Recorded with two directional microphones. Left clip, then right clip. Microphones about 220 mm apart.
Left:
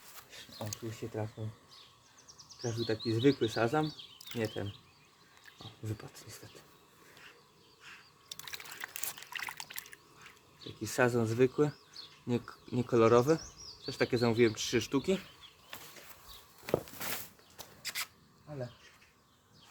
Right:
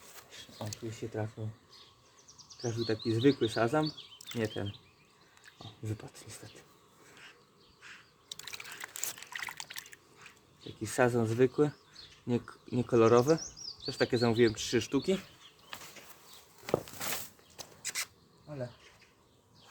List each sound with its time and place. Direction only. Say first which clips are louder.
0.2 s speech: even; centre (ahead or behind)
2.6 s speech: right 1 dB; 5° right (ahead or behind)
4.4 s speech: right 1 dB; 15° right (ahead or behind)
5.8 s speech: right 2 dB; 10° right (ahead or behind)
8.3 s a sound: right 1 dB; centre (ahead or behind)
10.6 s speech: right 1 dB; 5° right (ahead or behind)
17.0 s a sound: right 2 dB; 20° right (ahead or behind)